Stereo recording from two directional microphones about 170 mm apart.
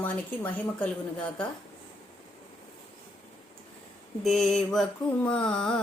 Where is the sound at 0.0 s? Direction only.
10° left (ahead or behind).